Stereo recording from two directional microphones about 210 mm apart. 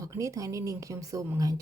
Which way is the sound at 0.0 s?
15° right (ahead or behind).